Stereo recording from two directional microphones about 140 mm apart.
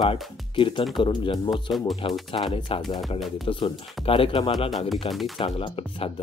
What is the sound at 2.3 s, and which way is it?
Speech, 40° left (ahead or behind).